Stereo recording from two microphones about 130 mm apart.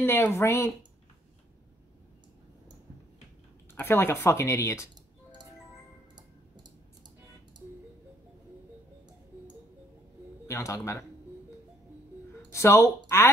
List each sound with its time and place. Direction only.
0.0 s speech: 20° left (ahead or behind)
3.7 s speech: 15° left (ahead or behind)
10.5 s speech: 20° left (ahead or behind)
12.4 s speech: 20° left (ahead or behind)